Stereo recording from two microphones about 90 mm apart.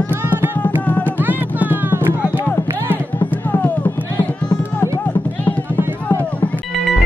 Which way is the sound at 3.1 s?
20° left (ahead or behind).